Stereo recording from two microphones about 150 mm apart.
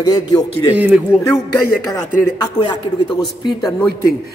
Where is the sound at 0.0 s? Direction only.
25° left (ahead or behind).